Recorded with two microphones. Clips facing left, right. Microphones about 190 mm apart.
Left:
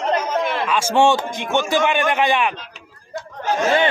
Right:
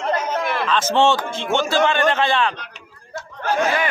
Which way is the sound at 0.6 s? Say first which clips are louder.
Left 1 dB; 10° left (ahead or behind).